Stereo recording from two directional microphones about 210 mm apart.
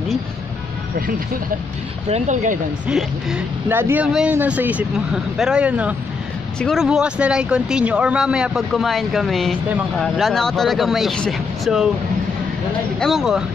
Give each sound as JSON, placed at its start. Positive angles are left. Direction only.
{"t": 2.0, "sound": "speech", "side_deg": -35}
{"t": 2.9, "sound": "speech", "side_deg": -5}
{"t": 13.0, "sound": "speech", "side_deg": 0}